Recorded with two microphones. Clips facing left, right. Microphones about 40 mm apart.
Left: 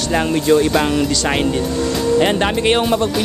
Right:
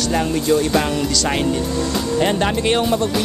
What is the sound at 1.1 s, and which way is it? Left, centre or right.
Speech, left.